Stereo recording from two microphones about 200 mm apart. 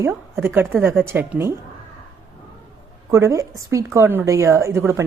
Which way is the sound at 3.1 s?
15° right (ahead or behind).